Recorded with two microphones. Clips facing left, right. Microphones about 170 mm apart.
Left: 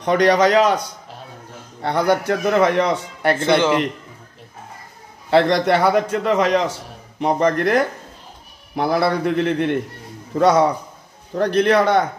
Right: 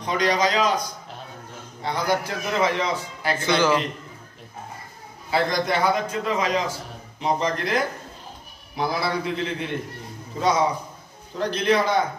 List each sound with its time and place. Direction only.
0.0 s a man's voice: 65° left (ahead or behind)
1.8 s a man's voice: 60° left (ahead or behind)
3.3 s speech: 25° left (ahead or behind)
5.3 s a man's voice: 70° left (ahead or behind)
7.2 s a man's voice: 55° left (ahead or behind)